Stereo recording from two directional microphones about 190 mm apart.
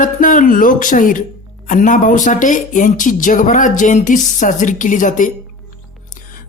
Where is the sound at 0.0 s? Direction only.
45° left (ahead or behind).